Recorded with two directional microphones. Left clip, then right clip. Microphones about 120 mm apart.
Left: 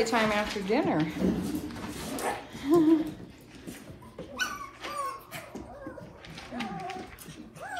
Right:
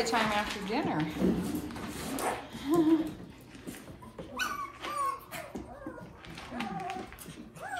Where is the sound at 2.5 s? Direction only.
25° right (ahead or behind).